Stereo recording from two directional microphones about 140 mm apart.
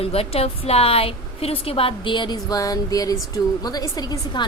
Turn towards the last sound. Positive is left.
turn(degrees=25)  # may be behind; listen again after turning